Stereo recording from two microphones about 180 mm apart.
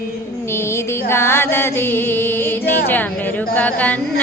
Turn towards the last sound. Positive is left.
turn(degrees=10)  # may be behind; listen again after turning